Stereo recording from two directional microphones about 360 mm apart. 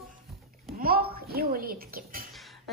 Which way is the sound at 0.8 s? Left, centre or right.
Right.